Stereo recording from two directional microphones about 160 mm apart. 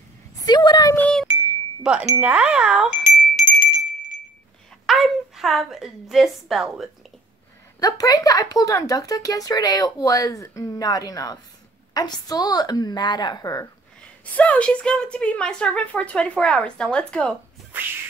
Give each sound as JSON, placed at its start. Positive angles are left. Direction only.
{"t": 0.4, "sound": "a sound", "side_deg": 25}
{"t": 0.9, "sound": "wind chime", "side_deg": 10}
{"t": 1.8, "sound": "wind chime", "side_deg": -5}
{"t": 2.1, "sound": "a woman's voice", "side_deg": -10}
{"t": 3.3, "sound": "bell", "side_deg": 60}
{"t": 4.8, "sound": "a woman's voice", "side_deg": 0}
{"t": 7.8, "sound": "speech", "side_deg": 25}
{"t": 14.3, "sound": "speech", "side_deg": 10}